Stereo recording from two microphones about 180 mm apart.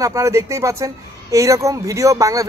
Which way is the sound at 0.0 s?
15° right (ahead or behind).